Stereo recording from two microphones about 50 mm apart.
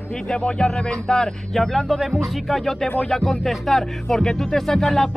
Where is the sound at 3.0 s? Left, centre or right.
Centre.